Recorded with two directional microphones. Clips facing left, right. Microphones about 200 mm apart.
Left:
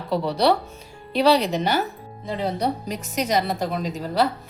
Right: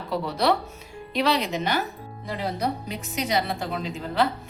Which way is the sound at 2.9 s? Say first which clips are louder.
Left 3 dB; 40° left (ahead or behind).